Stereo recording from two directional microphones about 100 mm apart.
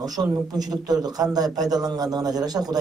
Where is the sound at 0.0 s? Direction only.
40° right (ahead or behind).